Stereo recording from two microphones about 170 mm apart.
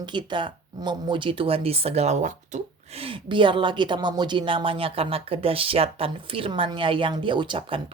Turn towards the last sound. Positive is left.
turn(degrees=-30)  # may be behind; listen again after turning